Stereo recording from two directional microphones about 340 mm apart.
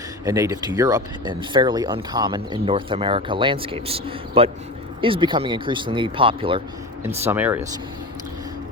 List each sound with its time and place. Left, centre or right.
0.3 s speech: centre
7.3 s speech: centre